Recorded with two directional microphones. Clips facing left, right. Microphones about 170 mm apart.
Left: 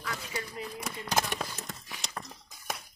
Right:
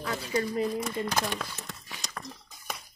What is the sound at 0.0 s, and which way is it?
Speech, 35° right (ahead or behind).